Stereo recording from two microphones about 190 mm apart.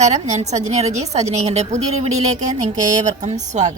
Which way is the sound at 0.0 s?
35° right (ahead or behind).